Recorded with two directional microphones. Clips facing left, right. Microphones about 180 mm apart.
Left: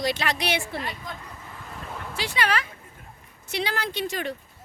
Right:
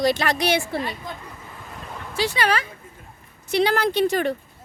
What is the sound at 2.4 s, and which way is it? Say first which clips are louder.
Speech: right 2 dB; 35° right (ahead or behind).